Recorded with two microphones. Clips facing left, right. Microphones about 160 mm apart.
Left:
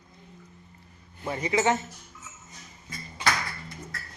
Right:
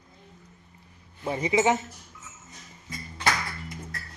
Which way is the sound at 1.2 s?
20° right (ahead or behind).